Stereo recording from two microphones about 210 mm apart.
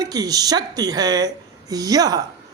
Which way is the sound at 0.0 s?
15° right (ahead or behind).